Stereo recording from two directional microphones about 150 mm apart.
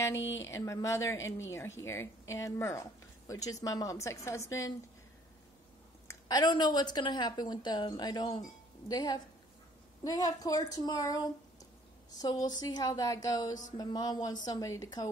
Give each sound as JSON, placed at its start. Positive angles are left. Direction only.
{"t": 0.0, "sound": "a woman's voice", "side_deg": 20}
{"t": 6.0, "sound": "a woman's voice", "side_deg": 25}